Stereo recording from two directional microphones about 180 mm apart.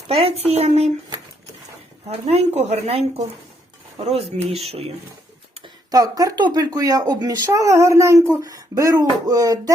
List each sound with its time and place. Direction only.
0.1 s a woman's voice: 35° right (ahead or behind)
2.0 s a woman's voice: 35° right (ahead or behind)
5.5 s speech: 25° right (ahead or behind)